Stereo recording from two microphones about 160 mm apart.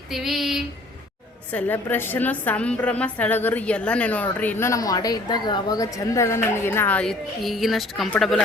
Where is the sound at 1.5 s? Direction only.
10° left (ahead or behind).